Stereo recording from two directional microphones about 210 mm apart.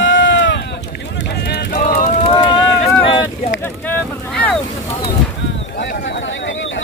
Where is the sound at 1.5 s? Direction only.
40° left (ahead or behind).